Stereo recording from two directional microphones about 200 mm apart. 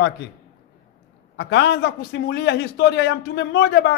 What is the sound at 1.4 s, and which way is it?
A man's voice, 60° left (ahead or behind).